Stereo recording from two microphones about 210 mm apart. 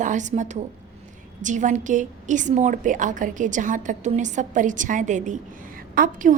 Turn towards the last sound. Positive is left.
turn(degrees=-40)  # may be behind; listen again after turning